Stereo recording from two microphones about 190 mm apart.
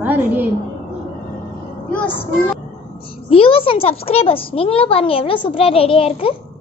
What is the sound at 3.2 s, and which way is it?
A child's voice, 30° left (ahead or behind).